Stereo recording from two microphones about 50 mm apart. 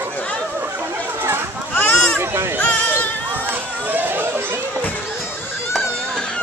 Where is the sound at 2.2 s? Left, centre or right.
Right.